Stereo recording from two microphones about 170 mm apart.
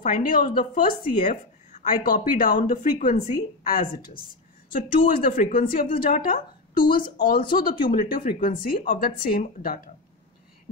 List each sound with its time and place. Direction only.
0.0 s a woman's voice: 50° left (ahead or behind)